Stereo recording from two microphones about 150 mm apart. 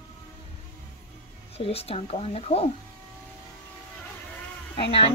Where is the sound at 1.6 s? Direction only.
40° left (ahead or behind).